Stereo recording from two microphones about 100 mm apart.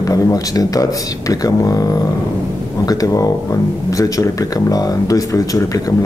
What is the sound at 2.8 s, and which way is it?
Speech, 35° left (ahead or behind).